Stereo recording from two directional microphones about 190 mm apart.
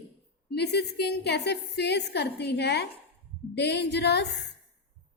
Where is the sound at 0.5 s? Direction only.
60° left (ahead or behind).